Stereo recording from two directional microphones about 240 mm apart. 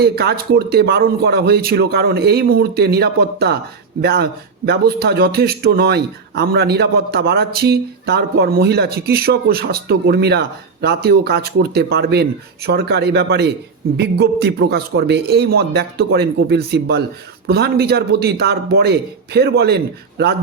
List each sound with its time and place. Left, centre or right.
0.0 s a man's voice: right